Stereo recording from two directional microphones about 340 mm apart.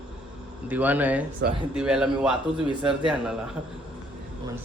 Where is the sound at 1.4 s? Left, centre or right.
Right.